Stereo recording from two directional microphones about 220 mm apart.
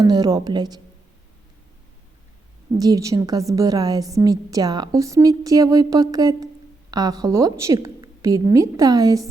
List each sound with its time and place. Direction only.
0.0 s a woman's voice: 15° right (ahead or behind)
2.7 s a woman's voice: 15° right (ahead or behind)